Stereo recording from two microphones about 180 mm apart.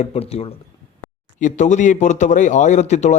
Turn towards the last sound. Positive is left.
turn(degrees=40)  # may be behind; listen again after turning